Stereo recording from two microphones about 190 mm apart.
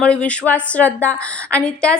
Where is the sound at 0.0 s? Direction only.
5° left (ahead or behind).